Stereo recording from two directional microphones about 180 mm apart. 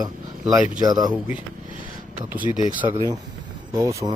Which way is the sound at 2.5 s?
35° left (ahead or behind).